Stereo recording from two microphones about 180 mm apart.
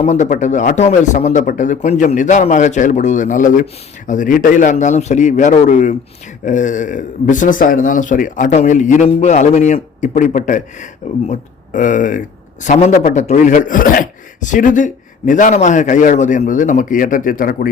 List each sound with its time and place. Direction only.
0.0 s speech: 40° left (ahead or behind)